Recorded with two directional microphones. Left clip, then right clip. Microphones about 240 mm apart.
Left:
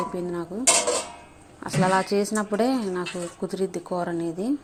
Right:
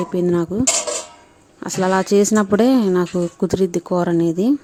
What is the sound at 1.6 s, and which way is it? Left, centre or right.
Speech, right.